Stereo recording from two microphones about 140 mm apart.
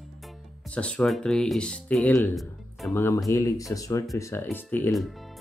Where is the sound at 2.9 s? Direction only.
20° left (ahead or behind).